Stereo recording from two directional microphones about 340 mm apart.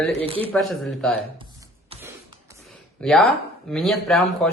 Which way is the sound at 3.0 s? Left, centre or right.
Centre.